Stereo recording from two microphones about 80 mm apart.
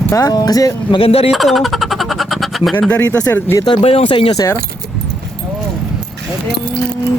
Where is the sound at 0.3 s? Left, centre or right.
Left.